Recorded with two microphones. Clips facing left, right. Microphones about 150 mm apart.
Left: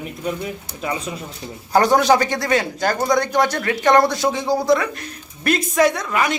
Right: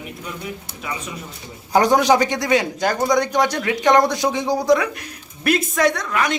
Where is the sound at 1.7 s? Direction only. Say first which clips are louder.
Even; 15° right (ahead or behind).